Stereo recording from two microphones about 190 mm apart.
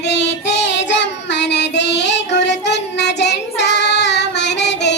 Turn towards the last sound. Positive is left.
turn(degrees=65)  # may be behind; listen again after turning